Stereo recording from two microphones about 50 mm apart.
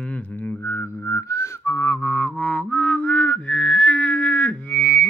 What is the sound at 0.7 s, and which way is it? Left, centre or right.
Whistling, left.